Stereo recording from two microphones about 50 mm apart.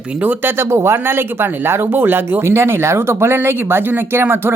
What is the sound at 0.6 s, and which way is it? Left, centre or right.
Speech, right.